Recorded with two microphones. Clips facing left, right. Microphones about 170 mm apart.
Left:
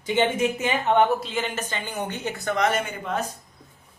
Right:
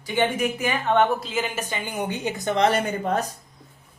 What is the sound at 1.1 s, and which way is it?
Speech, centre (ahead or behind).